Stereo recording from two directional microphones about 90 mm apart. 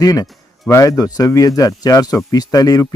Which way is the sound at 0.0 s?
40° left (ahead or behind).